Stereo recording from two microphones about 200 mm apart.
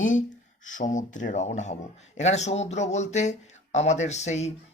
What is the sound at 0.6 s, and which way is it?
A man's voice, 40° left (ahead or behind).